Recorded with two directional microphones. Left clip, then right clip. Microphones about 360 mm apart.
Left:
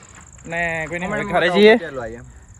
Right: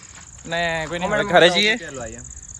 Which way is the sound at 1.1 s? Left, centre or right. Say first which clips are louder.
Right 5 dB; right.